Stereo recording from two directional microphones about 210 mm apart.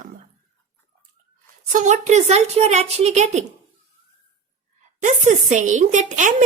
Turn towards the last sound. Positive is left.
turn(degrees=-35)  # may be behind; listen again after turning